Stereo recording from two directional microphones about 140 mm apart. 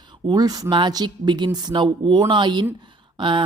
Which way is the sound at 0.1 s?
30° right (ahead or behind).